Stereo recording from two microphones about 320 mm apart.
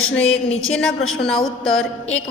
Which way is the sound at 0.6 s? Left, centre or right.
Centre.